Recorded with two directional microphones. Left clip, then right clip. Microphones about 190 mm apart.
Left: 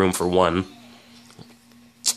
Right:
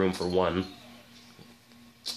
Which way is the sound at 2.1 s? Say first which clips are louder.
Left 11 dB; 45° left (ahead or behind).